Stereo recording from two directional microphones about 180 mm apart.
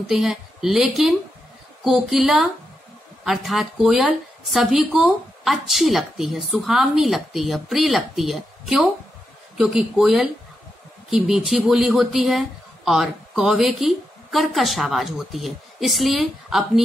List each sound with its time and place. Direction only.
0.1 s speech: centre (ahead or behind)